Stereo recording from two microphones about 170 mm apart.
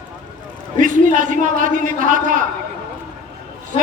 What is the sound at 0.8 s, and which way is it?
A man's voice, 50° right (ahead or behind).